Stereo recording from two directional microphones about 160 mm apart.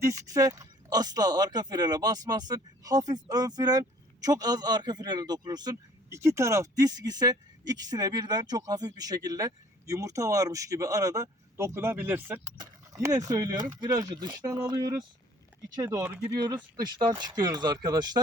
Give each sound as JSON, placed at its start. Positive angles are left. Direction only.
{"t": 0.0, "sound": "speech", "side_deg": -20}
{"t": 16.3, "sound": "speech", "side_deg": -25}